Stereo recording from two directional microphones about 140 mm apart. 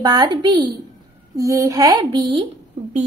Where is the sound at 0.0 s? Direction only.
30° right (ahead or behind).